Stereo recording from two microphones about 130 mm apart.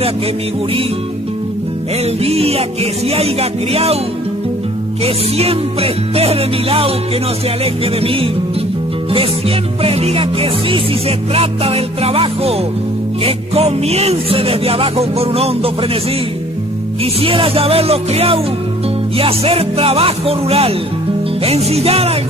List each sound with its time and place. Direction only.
2.2 s music: 50° right (ahead or behind)
5.0 s music: 50° right (ahead or behind)
9.8 s music: 50° right (ahead or behind)
17.0 s music: 45° right (ahead or behind)